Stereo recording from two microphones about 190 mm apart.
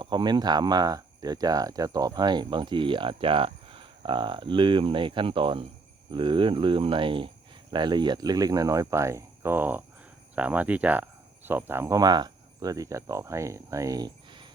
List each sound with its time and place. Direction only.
0.0 s speech: 25° right (ahead or behind)